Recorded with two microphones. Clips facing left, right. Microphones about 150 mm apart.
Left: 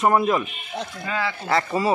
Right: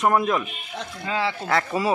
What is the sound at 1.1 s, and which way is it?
Speech, 25° right (ahead or behind).